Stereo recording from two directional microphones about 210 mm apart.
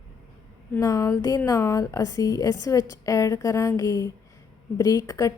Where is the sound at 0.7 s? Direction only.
15° left (ahead or behind).